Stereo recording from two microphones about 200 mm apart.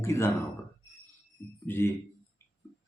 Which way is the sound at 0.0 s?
15° left (ahead or behind).